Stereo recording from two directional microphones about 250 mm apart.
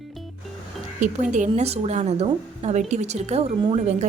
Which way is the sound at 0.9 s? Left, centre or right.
Right.